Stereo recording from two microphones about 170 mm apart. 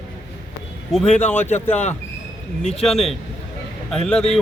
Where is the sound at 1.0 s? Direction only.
40° left (ahead or behind).